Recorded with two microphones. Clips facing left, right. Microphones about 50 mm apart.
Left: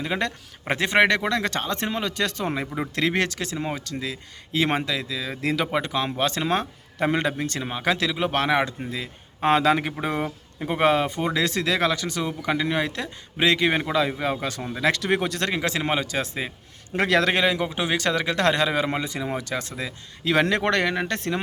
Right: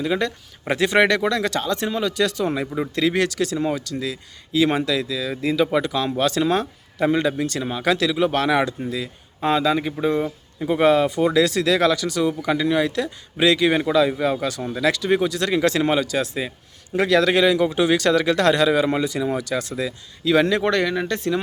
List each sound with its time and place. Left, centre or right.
0.7 s speech: left
4.5 s speech: left
4.9 s speech: left
7.6 s speech: left
9.5 s speech: left
13.7 s speech: centre
14.4 s speech: left
14.9 s speech: left
15.5 s speech: centre
16.0 s speech: left
20.2 s speech: left